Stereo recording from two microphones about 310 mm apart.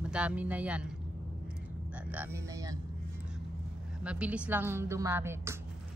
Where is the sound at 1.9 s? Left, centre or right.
Centre.